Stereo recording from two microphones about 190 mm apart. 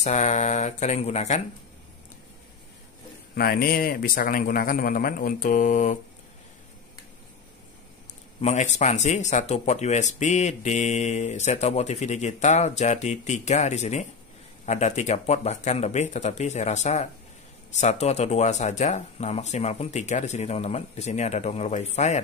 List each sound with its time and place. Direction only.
0.0 s speech: 35° left (ahead or behind)
3.3 s speech: 50° left (ahead or behind)
8.4 s speech: 40° left (ahead or behind)